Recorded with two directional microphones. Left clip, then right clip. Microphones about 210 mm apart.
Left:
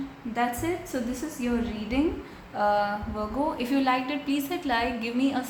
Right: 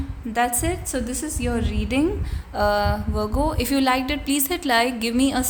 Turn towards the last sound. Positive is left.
turn(degrees=-50)  # may be behind; listen again after turning